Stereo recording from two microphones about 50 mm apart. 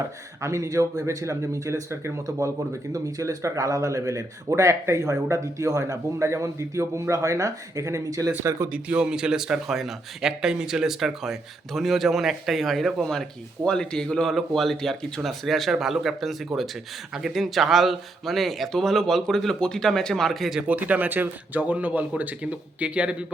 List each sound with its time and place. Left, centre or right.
0.4 s speech: right
3.2 s speech: right
8.7 s a man's voice: right; by 14.3 s centre
14.3 s speech: centre
19.5 s speech: centre
20.6 s a man's voice: right